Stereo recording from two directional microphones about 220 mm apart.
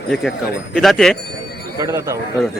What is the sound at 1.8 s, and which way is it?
Speech, 15° right (ahead or behind).